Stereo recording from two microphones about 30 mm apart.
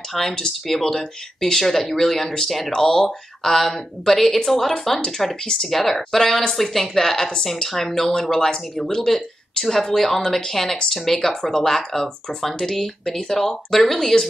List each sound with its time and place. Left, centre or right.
0.1 s a woman's voice: centre
5.7 s a woman's voice: centre